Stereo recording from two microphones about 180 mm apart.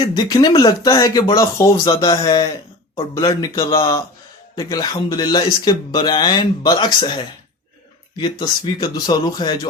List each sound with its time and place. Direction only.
0.2 s speech: 20° left (ahead or behind)